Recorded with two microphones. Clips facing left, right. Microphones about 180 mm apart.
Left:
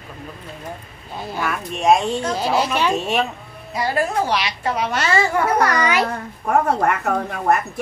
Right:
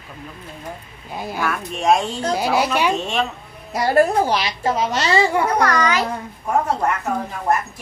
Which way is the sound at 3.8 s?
45° right (ahead or behind).